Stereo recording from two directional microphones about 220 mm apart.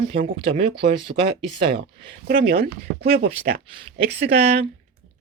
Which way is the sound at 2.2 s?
40° right (ahead or behind).